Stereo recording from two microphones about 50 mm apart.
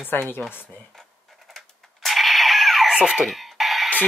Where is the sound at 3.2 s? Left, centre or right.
Centre.